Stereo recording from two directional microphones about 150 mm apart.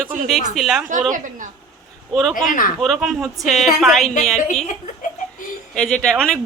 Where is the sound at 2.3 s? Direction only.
65° left (ahead or behind).